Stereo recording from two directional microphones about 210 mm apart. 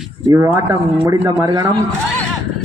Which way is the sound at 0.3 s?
15° right (ahead or behind).